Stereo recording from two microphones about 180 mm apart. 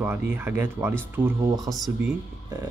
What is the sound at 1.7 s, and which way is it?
Speech, 5° right (ahead or behind).